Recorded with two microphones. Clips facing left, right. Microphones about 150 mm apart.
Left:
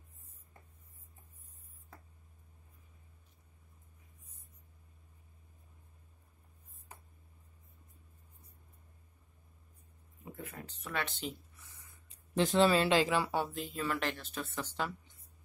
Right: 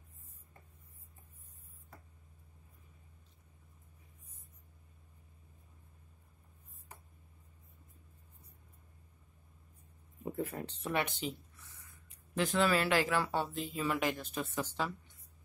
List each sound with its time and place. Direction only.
10.2 s speech: 30° right (ahead or behind)
11.6 s a sound: 20° left (ahead or behind)
13.4 s a woman's voice: centre (ahead or behind)